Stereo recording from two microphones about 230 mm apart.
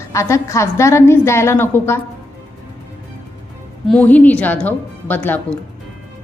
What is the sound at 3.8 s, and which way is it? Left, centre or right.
A woman's voice, centre.